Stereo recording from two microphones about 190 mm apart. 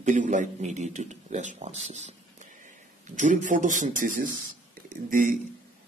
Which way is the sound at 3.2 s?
40° right (ahead or behind).